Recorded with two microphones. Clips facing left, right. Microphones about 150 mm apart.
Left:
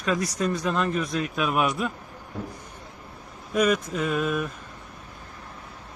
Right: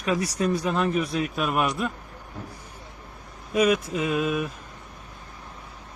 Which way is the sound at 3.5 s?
5° right (ahead or behind).